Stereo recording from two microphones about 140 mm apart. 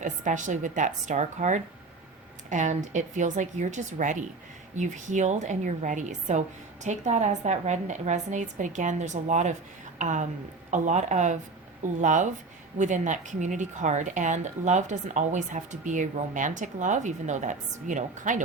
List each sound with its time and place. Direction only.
0.0 s a woman's voice: 60° right (ahead or behind)